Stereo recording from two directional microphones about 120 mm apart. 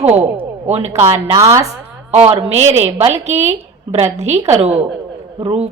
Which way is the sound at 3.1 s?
65° right (ahead or behind).